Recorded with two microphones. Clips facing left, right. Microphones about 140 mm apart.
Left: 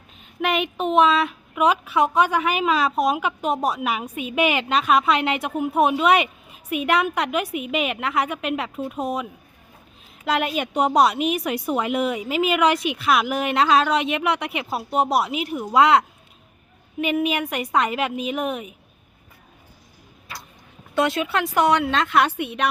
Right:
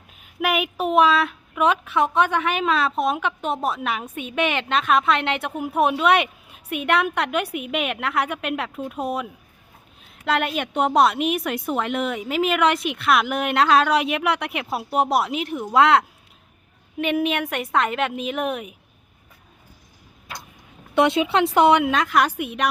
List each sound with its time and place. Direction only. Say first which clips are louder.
0.2 s a woman's voice: even; 5° right (ahead or behind)
20.9 s a woman's voice: right 3 dB; 20° right (ahead or behind); by 22.7 s centre (ahead or behind)